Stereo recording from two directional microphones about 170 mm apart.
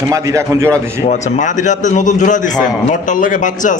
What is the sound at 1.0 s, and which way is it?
A man's voice, 45° left (ahead or behind).